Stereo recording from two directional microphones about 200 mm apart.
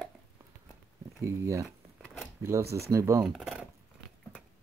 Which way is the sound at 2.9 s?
15° right (ahead or behind).